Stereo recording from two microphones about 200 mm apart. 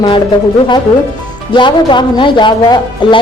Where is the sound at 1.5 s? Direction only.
25° left (ahead or behind).